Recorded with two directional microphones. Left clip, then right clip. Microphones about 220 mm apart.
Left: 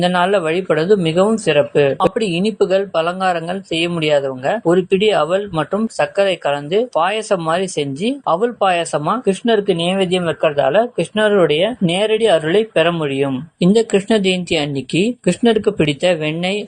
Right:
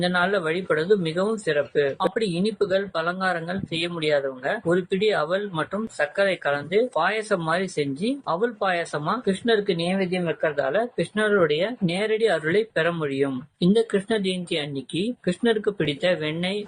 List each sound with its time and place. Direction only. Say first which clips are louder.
0.0 s speech: left 8 dB; 30° left (ahead or behind)